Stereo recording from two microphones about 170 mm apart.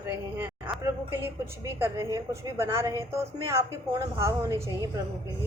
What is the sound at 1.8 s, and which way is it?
A woman's voice, 15° right (ahead or behind).